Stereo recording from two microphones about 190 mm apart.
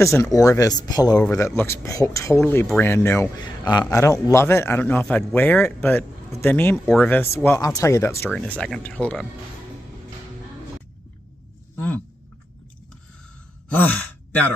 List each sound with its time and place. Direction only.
0.0 s speech: 15° left (ahead or behind)
11.7 s a sound: 10° left (ahead or behind)
13.7 s speech: 10° left (ahead or behind)